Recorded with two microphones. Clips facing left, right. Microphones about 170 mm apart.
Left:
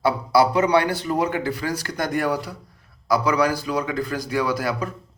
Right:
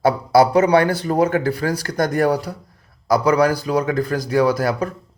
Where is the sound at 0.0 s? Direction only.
45° right (ahead or behind).